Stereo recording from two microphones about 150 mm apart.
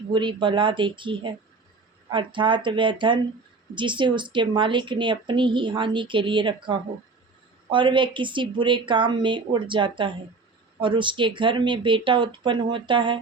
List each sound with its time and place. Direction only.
0.1 s speech: 30° right (ahead or behind)